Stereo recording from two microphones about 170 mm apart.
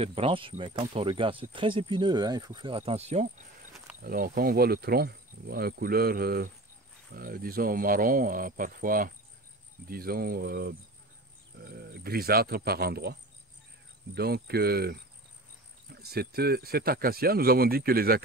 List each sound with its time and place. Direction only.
0.0 s speech: 35° right (ahead or behind)
4.0 s speech: 60° right (ahead or behind)